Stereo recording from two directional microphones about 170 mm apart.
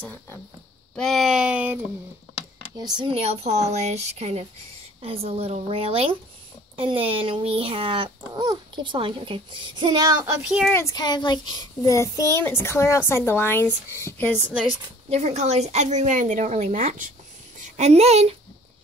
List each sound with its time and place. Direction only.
0.0 s speech: 10° left (ahead or behind)
0.9 s speech: centre (ahead or behind)
2.8 s a child's voice: 25° right (ahead or behind)
10.4 s speech: 5° right (ahead or behind)
10.7 s child singing: 15° left (ahead or behind)
12.4 s speech: 15° left (ahead or behind)
15.0 s a woman's voice: 40° right (ahead or behind)